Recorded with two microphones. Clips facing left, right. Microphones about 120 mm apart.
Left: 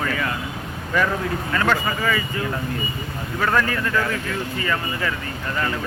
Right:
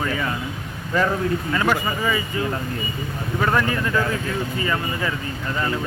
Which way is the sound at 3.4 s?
15° right (ahead or behind).